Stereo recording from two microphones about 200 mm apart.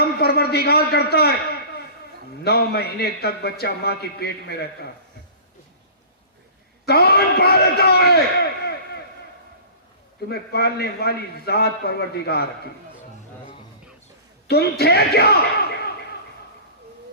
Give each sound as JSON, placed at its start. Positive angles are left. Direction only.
{"t": 0.0, "sound": "a man's voice", "side_deg": 50}
{"t": 6.8, "sound": "a man's voice", "side_deg": 50}
{"t": 10.2, "sound": "a man's voice", "side_deg": 55}
{"t": 14.4, "sound": "a man's voice", "side_deg": 55}